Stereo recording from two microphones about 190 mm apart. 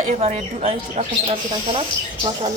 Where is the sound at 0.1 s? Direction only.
35° right (ahead or behind).